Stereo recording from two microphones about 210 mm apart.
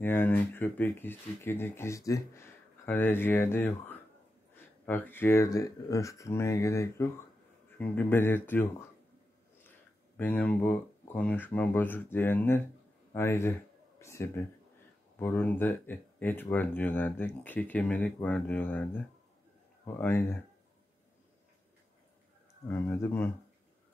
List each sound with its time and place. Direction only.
0.0 s speech: 10° left (ahead or behind)
10.1 s a man's voice: 10° left (ahead or behind)
22.7 s speech: 10° left (ahead or behind)